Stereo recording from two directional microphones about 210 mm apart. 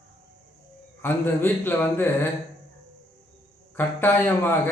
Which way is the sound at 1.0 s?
10° left (ahead or behind).